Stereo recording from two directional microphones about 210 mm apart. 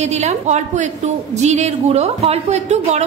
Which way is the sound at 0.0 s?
30° right (ahead or behind).